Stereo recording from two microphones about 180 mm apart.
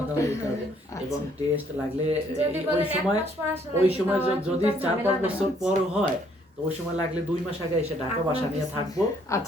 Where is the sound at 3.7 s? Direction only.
10° right (ahead or behind).